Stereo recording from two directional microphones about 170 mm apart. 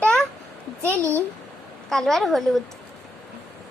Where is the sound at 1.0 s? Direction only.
15° right (ahead or behind).